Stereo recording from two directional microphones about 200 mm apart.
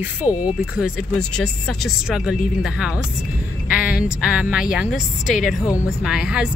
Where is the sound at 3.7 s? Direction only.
5° right (ahead or behind).